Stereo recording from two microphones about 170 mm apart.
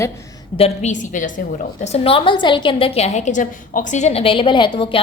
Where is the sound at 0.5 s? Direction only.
40° left (ahead or behind).